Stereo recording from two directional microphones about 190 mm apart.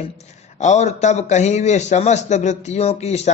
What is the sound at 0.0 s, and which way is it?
A man's voice, 35° left (ahead or behind).